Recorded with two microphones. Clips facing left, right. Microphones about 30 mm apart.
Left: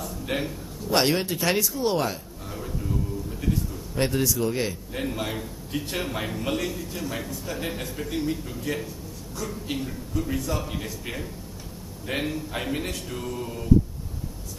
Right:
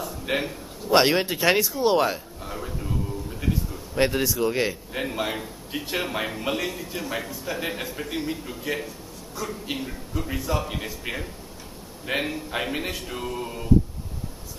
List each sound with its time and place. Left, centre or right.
0.0 s a man's voice: centre